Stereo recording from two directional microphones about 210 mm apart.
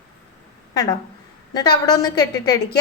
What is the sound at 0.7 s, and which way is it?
A woman's voice, 15° left (ahead or behind).